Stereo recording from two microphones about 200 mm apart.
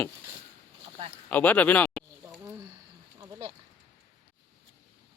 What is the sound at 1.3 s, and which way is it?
Speech, 10° left (ahead or behind).